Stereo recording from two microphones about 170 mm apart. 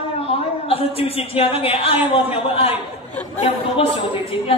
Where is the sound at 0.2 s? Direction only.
35° left (ahead or behind).